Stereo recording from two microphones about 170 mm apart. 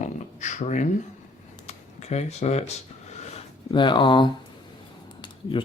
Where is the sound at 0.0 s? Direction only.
45° left (ahead or behind); by 4.3 s 30° left (ahead or behind).